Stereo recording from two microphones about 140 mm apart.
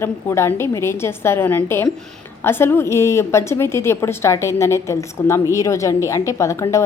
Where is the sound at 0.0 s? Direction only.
20° left (ahead or behind).